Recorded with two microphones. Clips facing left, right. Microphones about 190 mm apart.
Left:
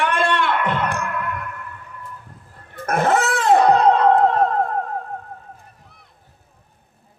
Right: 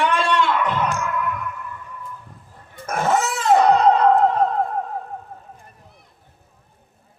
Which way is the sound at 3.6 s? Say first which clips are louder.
Right 1 dB; 60° left (ahead or behind).